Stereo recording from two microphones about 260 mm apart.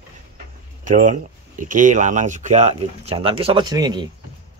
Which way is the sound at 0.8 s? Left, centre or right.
Right.